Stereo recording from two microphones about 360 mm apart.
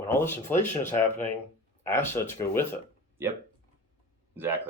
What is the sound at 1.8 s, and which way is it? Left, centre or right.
Speech, centre.